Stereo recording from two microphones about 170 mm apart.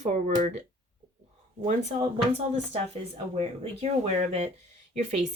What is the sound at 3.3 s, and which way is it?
Speech, 40° right (ahead or behind).